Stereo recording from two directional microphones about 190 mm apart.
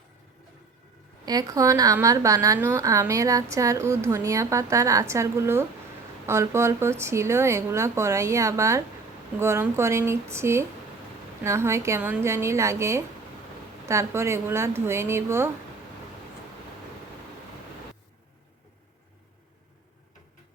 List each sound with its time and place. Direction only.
1.2 s a woman's voice: 20° right (ahead or behind)